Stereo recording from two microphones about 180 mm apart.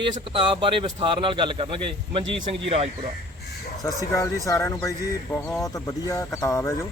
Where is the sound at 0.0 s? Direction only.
30° right (ahead or behind).